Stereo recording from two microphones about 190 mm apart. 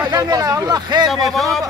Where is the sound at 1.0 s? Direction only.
Centre (ahead or behind).